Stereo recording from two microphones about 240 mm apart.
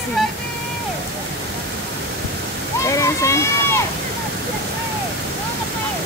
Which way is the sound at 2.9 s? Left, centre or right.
Centre.